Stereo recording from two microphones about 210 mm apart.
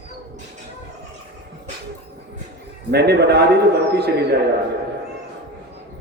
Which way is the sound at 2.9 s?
50° right (ahead or behind).